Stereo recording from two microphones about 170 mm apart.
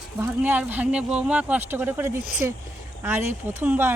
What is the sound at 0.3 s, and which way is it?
Speech, 10° right (ahead or behind).